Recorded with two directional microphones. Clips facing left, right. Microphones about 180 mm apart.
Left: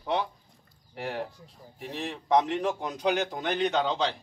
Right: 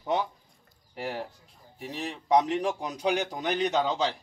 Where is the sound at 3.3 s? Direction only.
10° right (ahead or behind).